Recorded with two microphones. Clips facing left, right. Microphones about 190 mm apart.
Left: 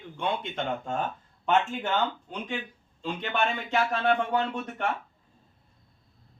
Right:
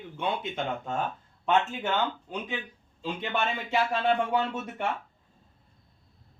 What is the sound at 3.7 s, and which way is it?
A man's voice, 5° right (ahead or behind).